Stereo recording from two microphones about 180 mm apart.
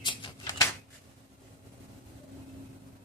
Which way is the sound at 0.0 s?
25° left (ahead or behind).